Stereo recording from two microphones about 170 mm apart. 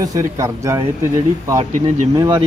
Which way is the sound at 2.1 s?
25° right (ahead or behind).